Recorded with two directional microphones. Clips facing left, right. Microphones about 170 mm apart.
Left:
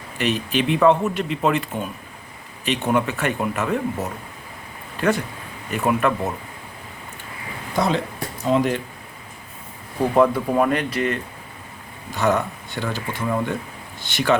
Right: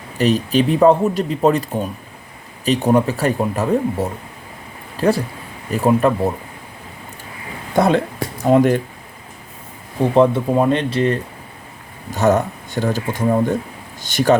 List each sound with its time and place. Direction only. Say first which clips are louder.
0.2 s speech: right 6 dB; 35° right (ahead or behind)
7.8 s speech: right 6 dB; 55° right (ahead or behind)
10.0 s speech: right 3 dB; 25° right (ahead or behind)
12.1 s speech: right 5 dB; 45° right (ahead or behind)